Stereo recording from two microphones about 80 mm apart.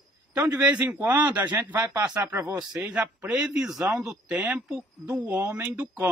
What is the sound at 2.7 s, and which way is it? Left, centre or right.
Speech, centre.